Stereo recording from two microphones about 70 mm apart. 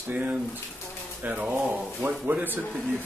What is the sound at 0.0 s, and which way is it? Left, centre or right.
A man's voice, right.